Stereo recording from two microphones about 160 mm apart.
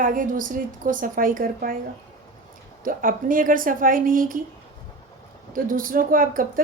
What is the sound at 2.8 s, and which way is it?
A woman's voice, 60° right (ahead or behind).